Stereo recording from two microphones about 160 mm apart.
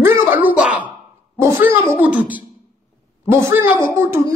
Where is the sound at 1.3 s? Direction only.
15° right (ahead or behind).